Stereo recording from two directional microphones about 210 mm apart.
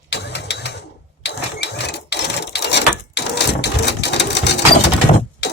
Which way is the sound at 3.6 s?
55° left (ahead or behind).